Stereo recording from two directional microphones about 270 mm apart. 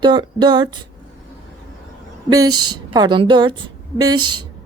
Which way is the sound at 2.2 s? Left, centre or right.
Centre.